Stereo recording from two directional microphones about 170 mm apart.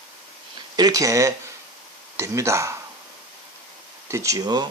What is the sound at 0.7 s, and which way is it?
Speech, 20° right (ahead or behind).